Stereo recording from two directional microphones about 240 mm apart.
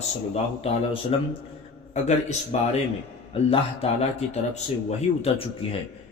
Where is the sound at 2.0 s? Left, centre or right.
Left.